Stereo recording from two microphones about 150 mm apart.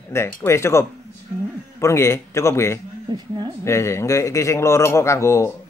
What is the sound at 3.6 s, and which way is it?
Speech, 20° left (ahead or behind).